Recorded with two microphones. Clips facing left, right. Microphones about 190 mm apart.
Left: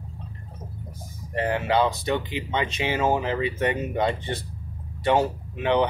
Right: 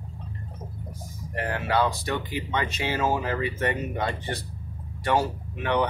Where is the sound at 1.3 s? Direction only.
20° left (ahead or behind).